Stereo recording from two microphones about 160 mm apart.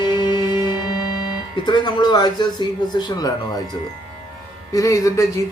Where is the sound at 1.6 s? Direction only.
25° left (ahead or behind).